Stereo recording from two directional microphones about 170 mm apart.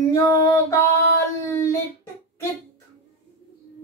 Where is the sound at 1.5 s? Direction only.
15° left (ahead or behind).